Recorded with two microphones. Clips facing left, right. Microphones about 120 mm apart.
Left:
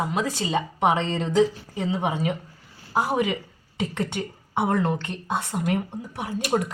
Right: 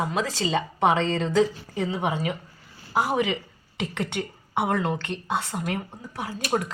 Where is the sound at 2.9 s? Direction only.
15° left (ahead or behind).